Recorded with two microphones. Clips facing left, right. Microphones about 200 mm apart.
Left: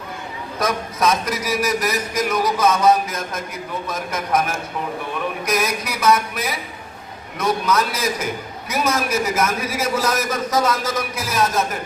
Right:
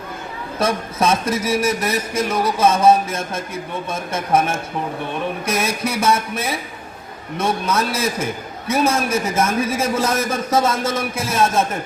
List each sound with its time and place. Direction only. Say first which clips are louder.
0.6 s a man's voice: right 1 dB; 25° right (ahead or behind)